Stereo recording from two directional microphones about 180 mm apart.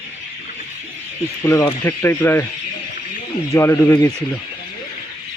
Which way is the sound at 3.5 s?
15° left (ahead or behind).